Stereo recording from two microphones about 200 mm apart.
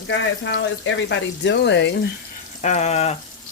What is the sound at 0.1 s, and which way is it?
Speech, 65° left (ahead or behind).